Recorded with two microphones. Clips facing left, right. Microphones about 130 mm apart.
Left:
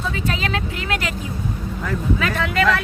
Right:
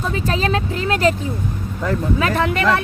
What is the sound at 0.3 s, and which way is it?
Speech, 35° right (ahead or behind).